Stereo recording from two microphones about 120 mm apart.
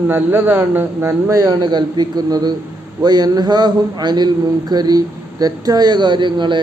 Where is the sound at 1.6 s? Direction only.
35° right (ahead or behind).